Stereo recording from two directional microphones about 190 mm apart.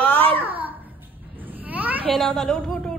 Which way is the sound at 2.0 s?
5° left (ahead or behind).